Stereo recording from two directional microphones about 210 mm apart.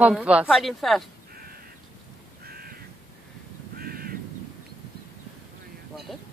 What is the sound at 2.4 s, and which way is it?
Crow, 45° right (ahead or behind).